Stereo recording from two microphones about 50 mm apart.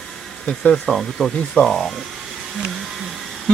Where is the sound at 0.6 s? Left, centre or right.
Centre.